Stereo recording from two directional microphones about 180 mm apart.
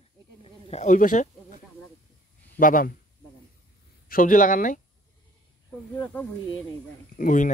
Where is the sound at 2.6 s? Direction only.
50° left (ahead or behind).